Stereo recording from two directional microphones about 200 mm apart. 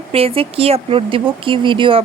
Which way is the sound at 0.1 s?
30° right (ahead or behind).